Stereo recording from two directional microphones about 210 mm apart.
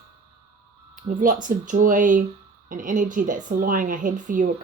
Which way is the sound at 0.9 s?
40° right (ahead or behind).